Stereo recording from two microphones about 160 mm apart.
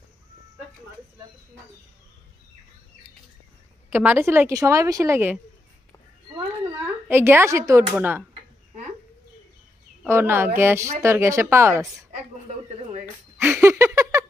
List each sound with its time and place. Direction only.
3.9 s a woman's voice: 10° right (ahead or behind)
7.1 s a woman's voice: 15° right (ahead or behind)
10.0 s a woman's voice: 15° right (ahead or behind)
13.4 s a sound: 15° right (ahead or behind)